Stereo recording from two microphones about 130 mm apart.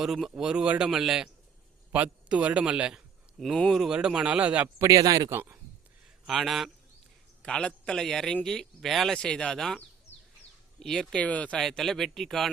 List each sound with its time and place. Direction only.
0.0 s a man's voice: 5° right (ahead or behind)
4.9 s speech: 25° right (ahead or behind)
5.3 s a man's voice: 15° right (ahead or behind)
6.2 s a man's voice: centre (ahead or behind)